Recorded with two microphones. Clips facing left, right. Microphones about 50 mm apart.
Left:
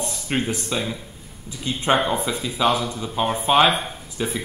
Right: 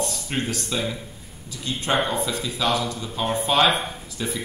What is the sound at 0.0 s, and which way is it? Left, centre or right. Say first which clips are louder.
Speech: left 2 dB; left.